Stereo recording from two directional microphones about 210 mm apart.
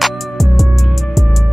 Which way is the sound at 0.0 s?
Centre (ahead or behind).